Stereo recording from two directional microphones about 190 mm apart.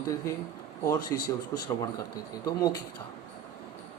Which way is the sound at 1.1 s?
15° left (ahead or behind).